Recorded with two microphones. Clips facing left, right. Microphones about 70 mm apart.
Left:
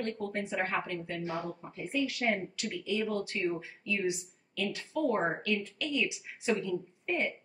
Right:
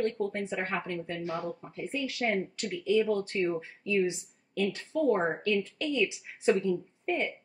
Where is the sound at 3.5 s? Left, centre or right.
Right.